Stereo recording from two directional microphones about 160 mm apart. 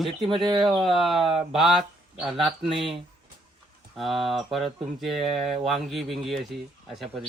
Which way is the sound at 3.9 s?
Centre (ahead or behind).